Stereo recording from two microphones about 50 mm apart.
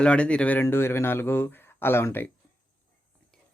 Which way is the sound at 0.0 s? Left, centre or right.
Left.